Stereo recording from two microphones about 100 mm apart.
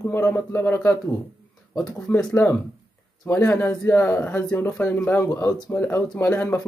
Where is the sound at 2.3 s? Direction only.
20° left (ahead or behind).